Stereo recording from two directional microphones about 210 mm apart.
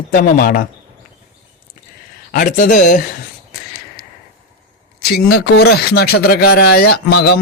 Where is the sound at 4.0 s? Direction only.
50° left (ahead or behind).